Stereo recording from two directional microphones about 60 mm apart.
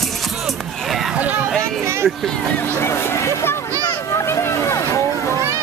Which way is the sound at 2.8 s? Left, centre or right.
Left.